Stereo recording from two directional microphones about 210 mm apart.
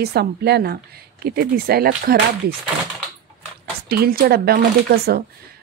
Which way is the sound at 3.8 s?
45° right (ahead or behind).